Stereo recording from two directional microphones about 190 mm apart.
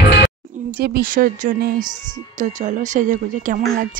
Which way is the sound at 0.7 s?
55° right (ahead or behind).